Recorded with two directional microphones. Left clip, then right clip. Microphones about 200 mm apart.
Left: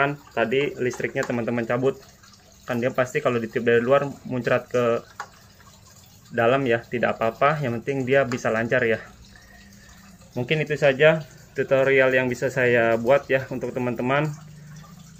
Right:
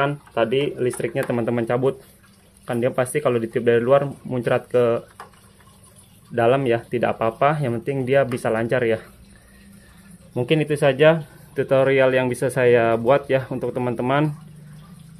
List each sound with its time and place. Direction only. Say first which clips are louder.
0.0 s speech: right 2 dB; 20° right (ahead or behind)
6.3 s speech: right 2 dB; 20° right (ahead or behind)
10.3 s speech: right 4 dB; 25° right (ahead or behind)